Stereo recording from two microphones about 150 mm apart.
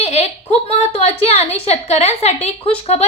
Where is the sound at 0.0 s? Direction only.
45° left (ahead or behind).